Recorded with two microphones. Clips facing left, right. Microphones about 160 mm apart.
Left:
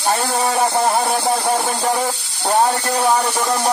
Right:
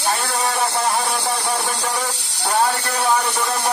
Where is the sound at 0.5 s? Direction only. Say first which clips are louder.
Left 5 dB; 40° left (ahead or behind).